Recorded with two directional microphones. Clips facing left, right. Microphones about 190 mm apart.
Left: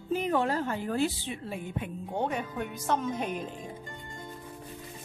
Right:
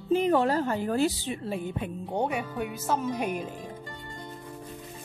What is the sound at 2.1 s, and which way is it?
Speech, 10° right (ahead or behind).